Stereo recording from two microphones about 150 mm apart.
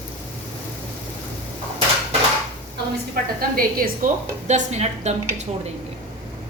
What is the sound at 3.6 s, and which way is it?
Speech, 75° right (ahead or behind).